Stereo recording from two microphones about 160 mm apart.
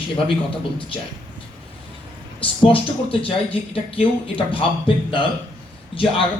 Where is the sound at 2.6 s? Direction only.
35° left (ahead or behind).